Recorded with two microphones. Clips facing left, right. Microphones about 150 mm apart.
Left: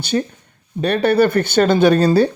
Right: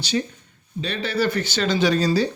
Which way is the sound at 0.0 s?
55° left (ahead or behind).